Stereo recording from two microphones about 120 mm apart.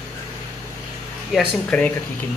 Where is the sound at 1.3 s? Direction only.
10° left (ahead or behind).